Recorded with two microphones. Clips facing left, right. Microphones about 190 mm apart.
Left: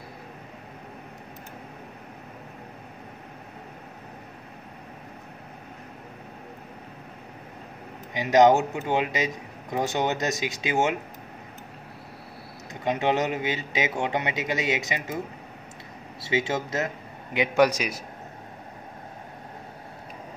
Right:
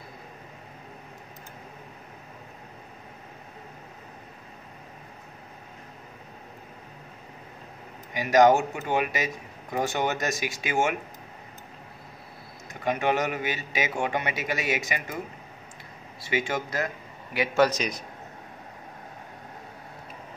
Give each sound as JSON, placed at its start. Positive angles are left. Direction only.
{"t": 8.1, "sound": "a man's voice", "side_deg": 20}
{"t": 12.8, "sound": "a man's voice", "side_deg": 20}
{"t": 16.2, "sound": "a man's voice", "side_deg": 25}